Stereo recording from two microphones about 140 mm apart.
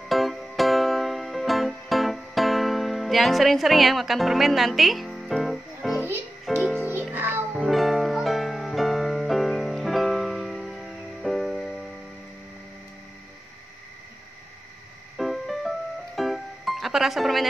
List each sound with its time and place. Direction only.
0.1 s music: centre (ahead or behind)
5.9 s music: 15° right (ahead or behind)
6.5 s music: centre (ahead or behind)
6.8 s music: 10° right (ahead or behind)
7.5 s music: centre (ahead or behind)
15.1 s music: centre (ahead or behind)